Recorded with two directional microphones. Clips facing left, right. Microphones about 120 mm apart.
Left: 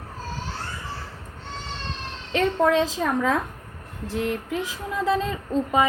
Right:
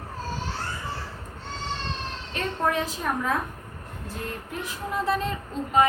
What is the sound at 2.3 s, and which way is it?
A woman's voice, 90° left.